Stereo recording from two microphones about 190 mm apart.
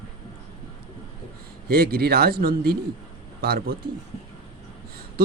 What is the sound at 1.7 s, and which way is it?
Speech, 55° right (ahead or behind).